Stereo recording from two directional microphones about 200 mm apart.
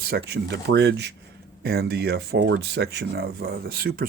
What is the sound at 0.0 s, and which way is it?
Speech, 50° right (ahead or behind).